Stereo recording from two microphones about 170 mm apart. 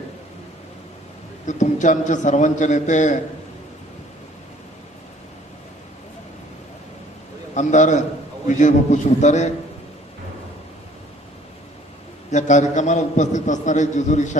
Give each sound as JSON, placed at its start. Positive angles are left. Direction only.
{"t": 1.5, "sound": "a man's voice", "side_deg": 45}
{"t": 7.5, "sound": "a man's voice", "side_deg": 45}
{"t": 12.3, "sound": "a man's voice", "side_deg": 45}